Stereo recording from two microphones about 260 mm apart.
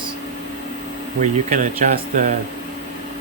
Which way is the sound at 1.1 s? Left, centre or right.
Right.